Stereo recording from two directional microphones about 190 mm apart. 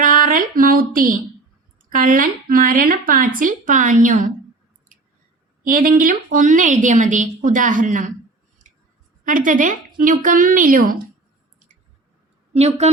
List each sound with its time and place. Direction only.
0.0 s a woman's voice: 45° right (ahead or behind)
5.6 s a woman's voice: 45° right (ahead or behind)
8.6 s a sound: 40° right (ahead or behind)
9.2 s a woman's voice: 45° right (ahead or behind)
12.5 s a woman's voice: 35° right (ahead or behind)